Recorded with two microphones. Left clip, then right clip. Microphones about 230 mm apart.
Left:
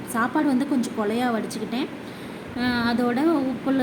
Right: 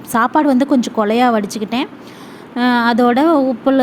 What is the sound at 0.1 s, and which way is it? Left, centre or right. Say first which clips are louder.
Speech: right 10 dB; right.